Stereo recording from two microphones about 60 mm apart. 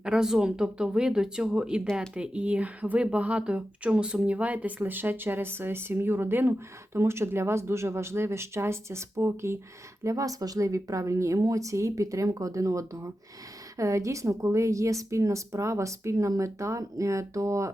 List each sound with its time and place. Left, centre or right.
0.0 s speech: centre; by 9.6 s right
10.0 s speech: right